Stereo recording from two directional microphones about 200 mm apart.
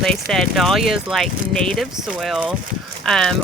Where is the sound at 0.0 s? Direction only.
Centre (ahead or behind).